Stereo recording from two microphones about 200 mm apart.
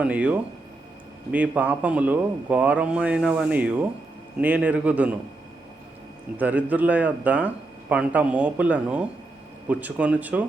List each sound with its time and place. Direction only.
0.0 s speech: 5° right (ahead or behind)
6.3 s speech: 5° right (ahead or behind)